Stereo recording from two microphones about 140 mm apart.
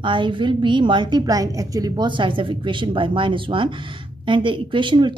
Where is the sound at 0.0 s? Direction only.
35° right (ahead or behind).